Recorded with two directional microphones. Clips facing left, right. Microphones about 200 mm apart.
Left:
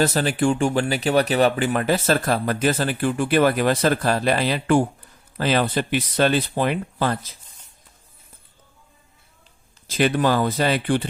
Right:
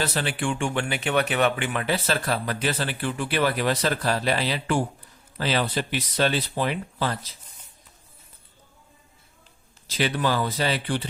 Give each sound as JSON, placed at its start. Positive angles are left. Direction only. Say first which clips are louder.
{"t": 0.0, "sound": "speech", "louder": "left 7 dB", "side_deg": 40}
{"t": 9.8, "sound": "speech", "louder": "left 5 dB", "side_deg": 50}